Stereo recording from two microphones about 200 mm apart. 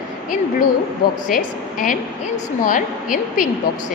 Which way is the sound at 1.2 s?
45° left (ahead or behind).